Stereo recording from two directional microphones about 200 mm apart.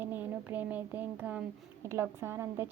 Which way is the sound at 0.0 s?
10° right (ahead or behind).